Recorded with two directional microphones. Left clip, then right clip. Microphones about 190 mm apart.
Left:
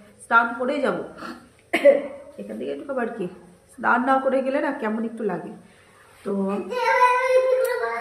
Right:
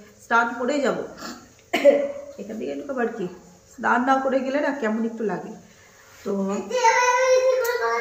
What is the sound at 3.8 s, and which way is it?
Speech, 15° left (ahead or behind).